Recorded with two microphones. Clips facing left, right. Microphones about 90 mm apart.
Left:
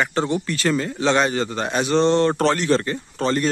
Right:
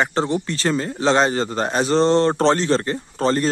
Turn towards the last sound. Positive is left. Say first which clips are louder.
# right 2 dB
turn(degrees=-35)  # may be behind; listen again after turning